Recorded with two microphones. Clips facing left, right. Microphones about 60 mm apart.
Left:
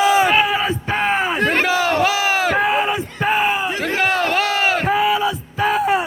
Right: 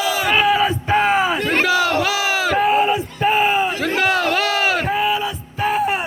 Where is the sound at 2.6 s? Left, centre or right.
Left.